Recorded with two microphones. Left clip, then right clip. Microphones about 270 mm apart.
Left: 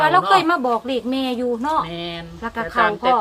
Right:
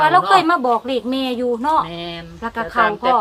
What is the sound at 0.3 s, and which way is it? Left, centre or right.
Speech, centre.